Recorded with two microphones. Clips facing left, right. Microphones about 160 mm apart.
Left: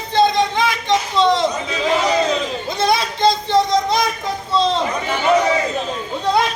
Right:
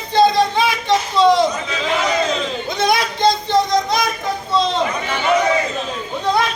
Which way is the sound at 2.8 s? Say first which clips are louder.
Even; 30° left (ahead or behind).